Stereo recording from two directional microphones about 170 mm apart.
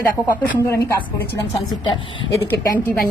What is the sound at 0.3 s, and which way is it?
A woman's voice, 15° left (ahead or behind).